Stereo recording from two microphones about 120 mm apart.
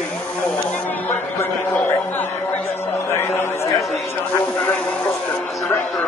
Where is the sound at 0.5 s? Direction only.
10° left (ahead or behind).